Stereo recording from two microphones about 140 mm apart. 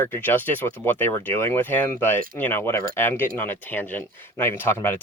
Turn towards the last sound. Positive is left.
turn(degrees=15)  # may be behind; listen again after turning